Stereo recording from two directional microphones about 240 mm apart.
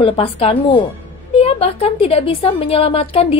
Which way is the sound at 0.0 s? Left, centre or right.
Left.